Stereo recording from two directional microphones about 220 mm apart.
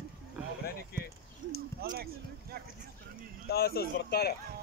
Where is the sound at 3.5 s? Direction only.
45° left (ahead or behind).